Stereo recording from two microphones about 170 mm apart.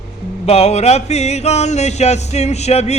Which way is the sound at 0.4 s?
40° left (ahead or behind).